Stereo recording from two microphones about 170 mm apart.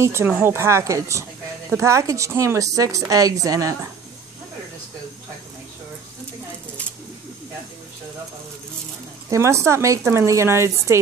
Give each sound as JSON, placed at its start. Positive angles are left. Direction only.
{"t": 0.0, "sound": "a woman's voice", "side_deg": -15}
{"t": 9.3, "sound": "speech", "side_deg": -15}